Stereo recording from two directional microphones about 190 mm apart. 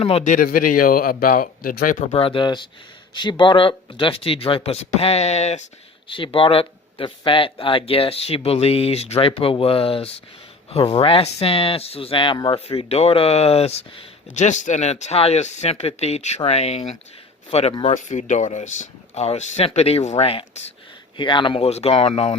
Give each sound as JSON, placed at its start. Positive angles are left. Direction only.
{"t": 0.0, "sound": "speech", "side_deg": 30}
{"t": 0.3, "sound": "speech", "side_deg": 50}
{"t": 2.1, "sound": "speech", "side_deg": 25}